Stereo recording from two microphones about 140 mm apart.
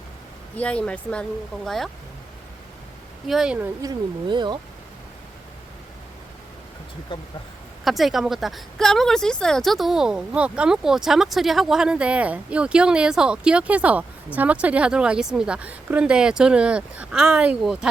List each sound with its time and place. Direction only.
0.5 s speech: 10° left (ahead or behind)
3.2 s speech: 5° right (ahead or behind)
3.8 s speech: 30° right (ahead or behind)
7.1 s speech: 35° left (ahead or behind)
7.9 s speech: centre (ahead or behind)